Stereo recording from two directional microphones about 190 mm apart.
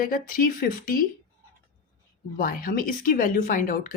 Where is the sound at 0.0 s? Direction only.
50° left (ahead or behind).